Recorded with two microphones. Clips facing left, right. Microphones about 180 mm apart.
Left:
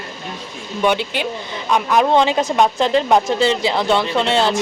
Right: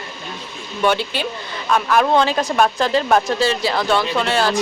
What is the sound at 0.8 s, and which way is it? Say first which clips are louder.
A woman's voice: left 1 dB; 15° left (ahead or behind).